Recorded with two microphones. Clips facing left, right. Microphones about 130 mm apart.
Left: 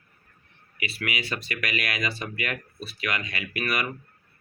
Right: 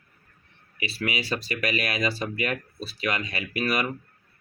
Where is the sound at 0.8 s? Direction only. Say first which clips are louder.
Right 2 dB; 30° right (ahead or behind).